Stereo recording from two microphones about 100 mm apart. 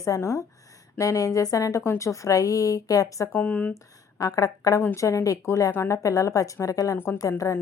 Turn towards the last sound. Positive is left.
turn(degrees=30)  # may be behind; listen again after turning